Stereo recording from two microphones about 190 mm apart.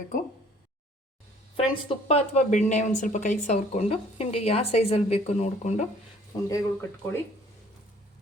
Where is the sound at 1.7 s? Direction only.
30° left (ahead or behind).